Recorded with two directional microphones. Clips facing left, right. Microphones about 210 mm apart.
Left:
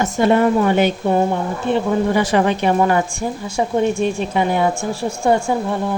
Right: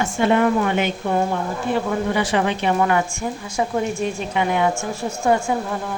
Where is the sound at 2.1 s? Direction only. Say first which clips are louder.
Left 4 dB; 40° left (ahead or behind).